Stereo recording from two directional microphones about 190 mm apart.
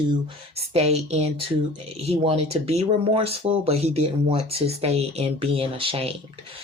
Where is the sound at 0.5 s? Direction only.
35° right (ahead or behind).